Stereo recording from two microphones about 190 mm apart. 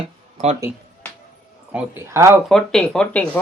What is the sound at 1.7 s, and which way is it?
Speech, 15° right (ahead or behind).